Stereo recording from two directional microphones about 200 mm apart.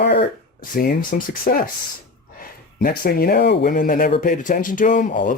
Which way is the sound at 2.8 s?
50° left (ahead or behind).